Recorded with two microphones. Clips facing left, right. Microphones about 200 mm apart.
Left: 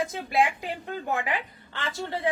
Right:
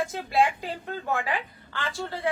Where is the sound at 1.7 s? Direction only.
20° left (ahead or behind).